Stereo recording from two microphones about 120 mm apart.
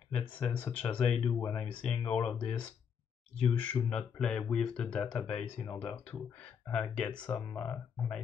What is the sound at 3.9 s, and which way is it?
Speech, 5° left (ahead or behind).